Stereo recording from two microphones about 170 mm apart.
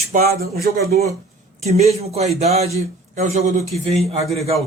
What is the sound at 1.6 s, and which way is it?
A man's voice, 40° right (ahead or behind).